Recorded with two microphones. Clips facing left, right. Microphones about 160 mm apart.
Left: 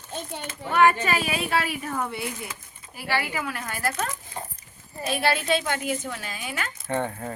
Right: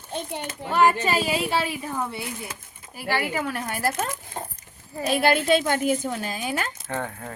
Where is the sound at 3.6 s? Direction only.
30° right (ahead or behind).